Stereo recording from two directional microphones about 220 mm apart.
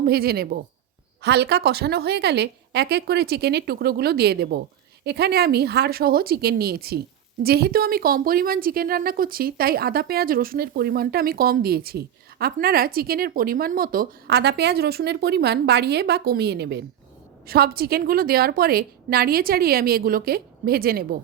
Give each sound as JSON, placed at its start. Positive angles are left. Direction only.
{"t": 0.0, "sound": "a woman's voice", "side_deg": -45}